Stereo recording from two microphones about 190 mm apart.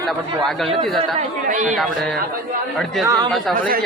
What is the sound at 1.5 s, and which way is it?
Speech, 40° right (ahead or behind).